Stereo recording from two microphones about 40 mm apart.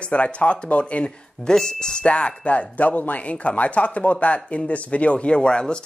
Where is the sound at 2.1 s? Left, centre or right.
Left.